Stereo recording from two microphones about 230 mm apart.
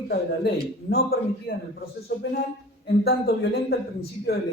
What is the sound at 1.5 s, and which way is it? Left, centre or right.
A man's voice, left.